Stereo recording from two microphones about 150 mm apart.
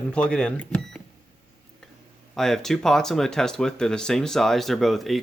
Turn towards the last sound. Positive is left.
turn(degrees=0)  # may be behind; listen again after turning